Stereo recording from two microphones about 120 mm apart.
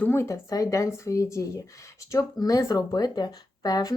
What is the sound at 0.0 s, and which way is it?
Speech, 20° left (ahead or behind).